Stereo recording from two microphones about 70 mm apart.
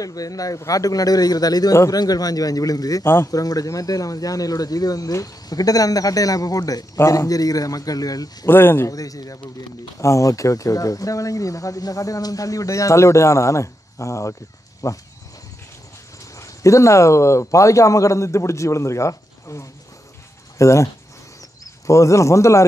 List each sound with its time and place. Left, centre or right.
0.0 s speech: left
3.0 s speech: left
3.3 s speech: left
8.5 s speech: left
8.8 s speech: left
16.3 s speech: left